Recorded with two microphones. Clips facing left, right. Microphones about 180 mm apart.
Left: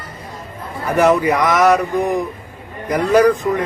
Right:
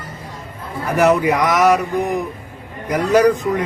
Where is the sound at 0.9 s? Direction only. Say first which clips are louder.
Left 1 dB; 10° right (ahead or behind).